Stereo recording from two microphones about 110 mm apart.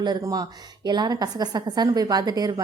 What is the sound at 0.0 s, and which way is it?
A woman's voice, 35° right (ahead or behind).